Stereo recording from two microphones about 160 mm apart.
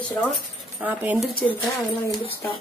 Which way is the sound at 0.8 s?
10° right (ahead or behind).